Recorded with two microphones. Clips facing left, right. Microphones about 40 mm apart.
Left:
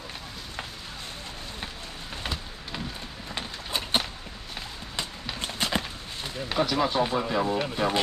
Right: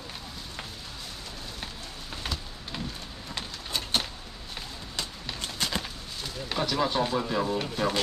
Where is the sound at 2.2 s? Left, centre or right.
Centre.